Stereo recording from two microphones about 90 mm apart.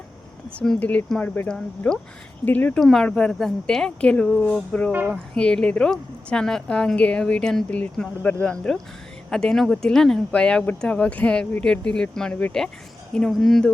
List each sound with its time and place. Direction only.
0.8 s a woman's voice: 15° left (ahead or behind)
2.8 s a woman's voice: 5° left (ahead or behind)